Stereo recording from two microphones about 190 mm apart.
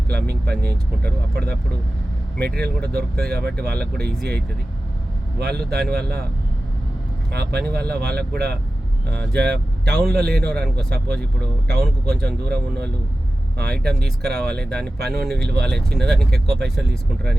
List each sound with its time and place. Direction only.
0.1 s speech: 55° right (ahead or behind)
7.3 s speech: 60° right (ahead or behind)